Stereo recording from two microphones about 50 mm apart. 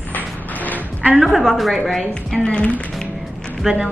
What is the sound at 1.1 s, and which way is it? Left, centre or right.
A woman's voice, centre.